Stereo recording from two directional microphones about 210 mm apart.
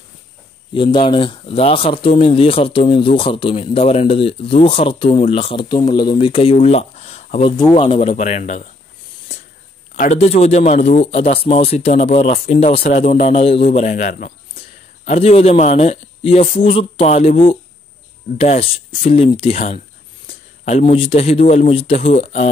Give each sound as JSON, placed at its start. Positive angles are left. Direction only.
{"t": 0.7, "sound": "speech", "side_deg": 25}
{"t": 9.9, "sound": "a man's voice", "side_deg": 35}